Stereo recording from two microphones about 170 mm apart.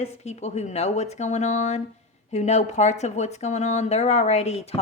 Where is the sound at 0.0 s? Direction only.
40° left (ahead or behind).